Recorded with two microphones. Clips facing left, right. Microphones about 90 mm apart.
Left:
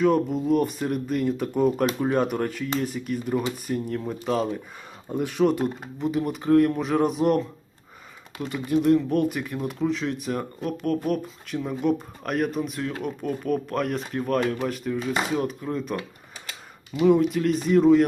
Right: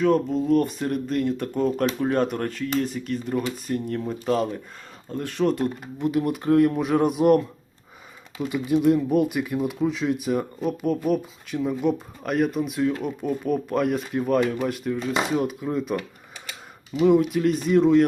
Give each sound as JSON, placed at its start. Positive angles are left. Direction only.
{"t": 0.0, "sound": "speech", "side_deg": 5}
{"t": 5.0, "sound": "speech", "side_deg": 15}
{"t": 17.1, "sound": "speech", "side_deg": 0}